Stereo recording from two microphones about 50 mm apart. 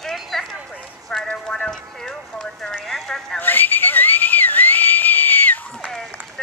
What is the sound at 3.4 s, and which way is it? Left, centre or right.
Whistle, left.